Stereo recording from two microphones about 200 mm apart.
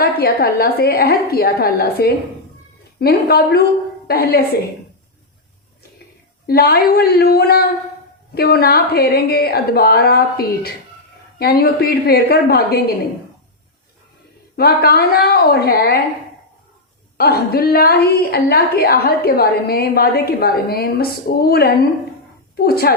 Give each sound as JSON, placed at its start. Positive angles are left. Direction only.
{"t": 0.0, "sound": "a woman's voice", "side_deg": 50}
{"t": 6.5, "sound": "a woman's voice", "side_deg": 50}
{"t": 14.5, "sound": "a woman's voice", "side_deg": 50}
{"t": 17.2, "sound": "a woman's voice", "side_deg": 50}